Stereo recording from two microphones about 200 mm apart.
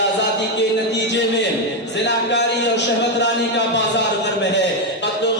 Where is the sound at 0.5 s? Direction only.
60° left (ahead or behind).